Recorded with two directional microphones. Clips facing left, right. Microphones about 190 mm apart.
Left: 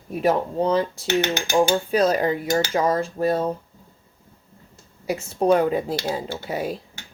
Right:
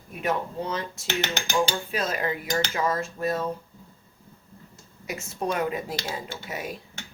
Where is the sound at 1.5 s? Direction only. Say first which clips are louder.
Left 8 dB; 40° left (ahead or behind).